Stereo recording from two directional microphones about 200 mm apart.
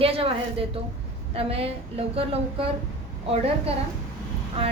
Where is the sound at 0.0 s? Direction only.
30° right (ahead or behind).